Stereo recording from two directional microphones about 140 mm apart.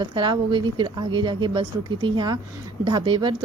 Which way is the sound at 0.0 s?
35° right (ahead or behind).